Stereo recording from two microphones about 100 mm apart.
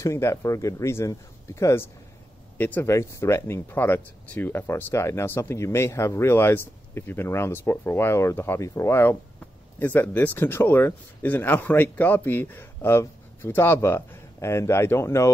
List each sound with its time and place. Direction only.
0.0 s speech: 30° left (ahead or behind)